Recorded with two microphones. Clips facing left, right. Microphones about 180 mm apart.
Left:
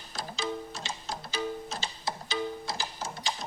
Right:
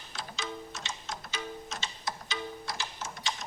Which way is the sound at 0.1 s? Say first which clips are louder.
Left 5 dB; 35° left (ahead or behind).